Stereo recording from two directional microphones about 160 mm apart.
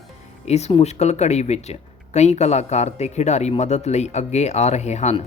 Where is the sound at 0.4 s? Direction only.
45° left (ahead or behind).